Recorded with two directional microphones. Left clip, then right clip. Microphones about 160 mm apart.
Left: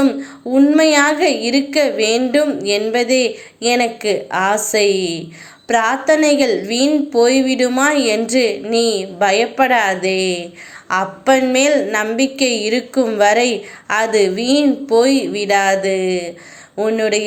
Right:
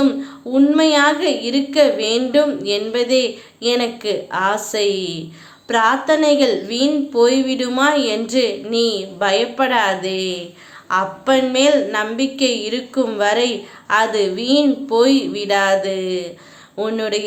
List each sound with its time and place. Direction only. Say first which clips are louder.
0.0 s a woman's voice: left 1 dB; 15° left (ahead or behind)